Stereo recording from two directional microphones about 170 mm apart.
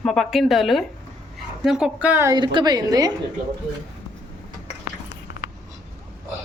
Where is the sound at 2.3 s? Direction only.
25° right (ahead or behind).